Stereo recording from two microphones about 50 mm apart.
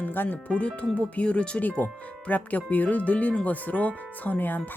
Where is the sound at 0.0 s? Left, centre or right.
Left.